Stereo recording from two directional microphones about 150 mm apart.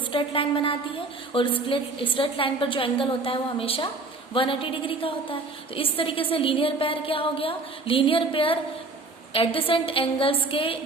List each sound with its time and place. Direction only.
0.1 s a woman's voice: 35° left (ahead or behind)